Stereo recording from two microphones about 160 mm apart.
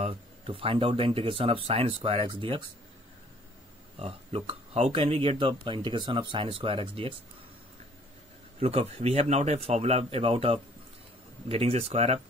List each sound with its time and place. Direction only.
0.0 s speech: 35° right (ahead or behind)
4.0 s speech: 35° right (ahead or behind)
8.5 s speech: 40° right (ahead or behind)